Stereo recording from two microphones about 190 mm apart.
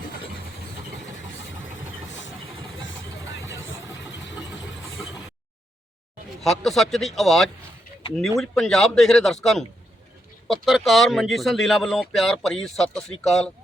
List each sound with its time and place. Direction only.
2.5 s vehicle: 25° right (ahead or behind)
6.4 s speech: centre (ahead or behind)